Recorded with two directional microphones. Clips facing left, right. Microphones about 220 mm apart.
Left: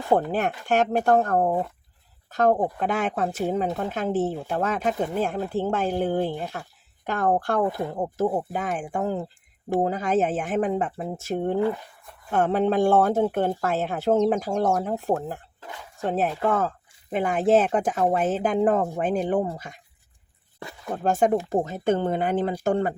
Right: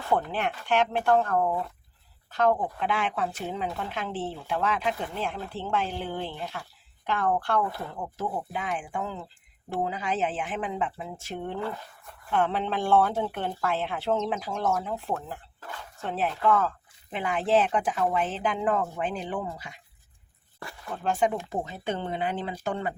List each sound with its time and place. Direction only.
0.2 s speech: 45° left (ahead or behind)
15.6 s a sound: 15° left (ahead or behind)
16.0 s speech: 45° left (ahead or behind)
20.9 s speech: 45° left (ahead or behind)